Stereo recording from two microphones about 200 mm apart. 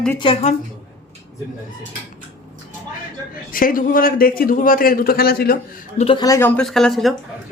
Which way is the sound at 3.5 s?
45° left (ahead or behind).